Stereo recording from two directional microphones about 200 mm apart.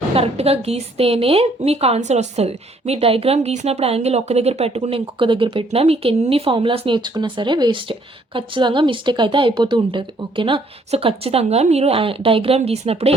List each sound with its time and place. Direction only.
0.1 s a woman's voice: 30° right (ahead or behind)